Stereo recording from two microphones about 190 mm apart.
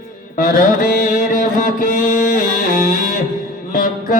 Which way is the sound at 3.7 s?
45° left (ahead or behind).